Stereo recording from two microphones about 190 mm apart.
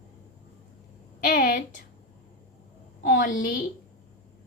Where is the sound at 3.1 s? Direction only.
45° left (ahead or behind).